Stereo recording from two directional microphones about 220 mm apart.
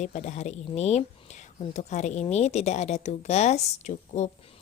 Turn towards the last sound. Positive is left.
turn(degrees=30)  # may be behind; listen again after turning